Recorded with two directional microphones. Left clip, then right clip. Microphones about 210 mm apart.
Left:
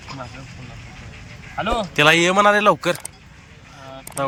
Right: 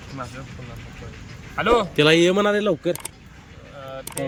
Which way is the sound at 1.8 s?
5° right (ahead or behind).